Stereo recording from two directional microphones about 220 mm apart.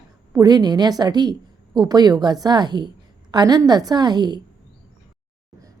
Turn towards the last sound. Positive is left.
turn(degrees=-20)  # may be behind; listen again after turning